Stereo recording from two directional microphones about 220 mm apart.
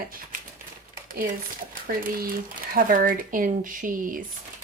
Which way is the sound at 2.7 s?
40° right (ahead or behind).